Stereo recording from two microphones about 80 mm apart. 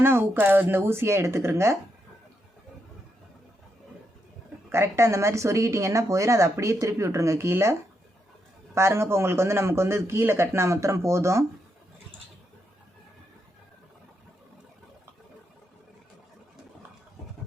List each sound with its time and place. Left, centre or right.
0.0 s speech: right
4.7 s speech: right